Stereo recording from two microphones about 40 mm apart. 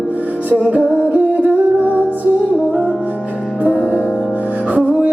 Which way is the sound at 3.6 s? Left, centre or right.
Right.